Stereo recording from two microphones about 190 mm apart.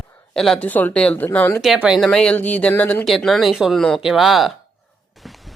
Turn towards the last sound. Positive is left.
turn(degrees=0)  # may be behind; listen again after turning